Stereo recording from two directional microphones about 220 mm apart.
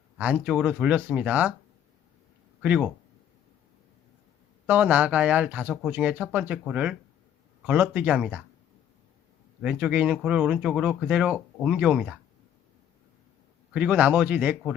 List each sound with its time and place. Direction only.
0.2 s speech: 5° right (ahead or behind)
2.6 s speech: 5° right (ahead or behind)
4.6 s speech: 5° right (ahead or behind)
9.6 s speech: 5° right (ahead or behind)
13.7 s speech: 5° right (ahead or behind)